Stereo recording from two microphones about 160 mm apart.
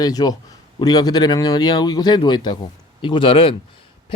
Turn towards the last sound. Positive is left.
turn(degrees=35)  # may be behind; listen again after turning